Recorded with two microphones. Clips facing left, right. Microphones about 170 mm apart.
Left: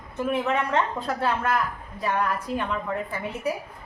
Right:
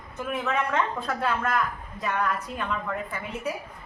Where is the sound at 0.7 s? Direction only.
30° left (ahead or behind).